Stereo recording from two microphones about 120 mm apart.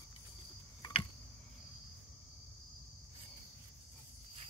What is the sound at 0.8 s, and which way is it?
Cricket, 45° left (ahead or behind).